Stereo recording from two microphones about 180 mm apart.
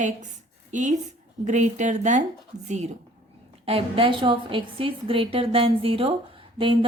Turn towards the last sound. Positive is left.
turn(degrees=-30)  # may be behind; listen again after turning